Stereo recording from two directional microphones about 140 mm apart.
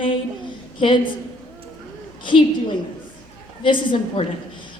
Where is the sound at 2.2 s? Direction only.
35° left (ahead or behind).